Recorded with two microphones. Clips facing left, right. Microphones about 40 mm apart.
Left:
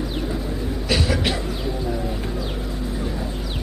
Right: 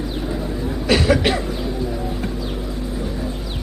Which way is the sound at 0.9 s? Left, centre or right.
Right.